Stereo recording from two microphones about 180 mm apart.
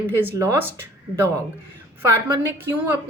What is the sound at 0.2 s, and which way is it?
Speech, 15° right (ahead or behind).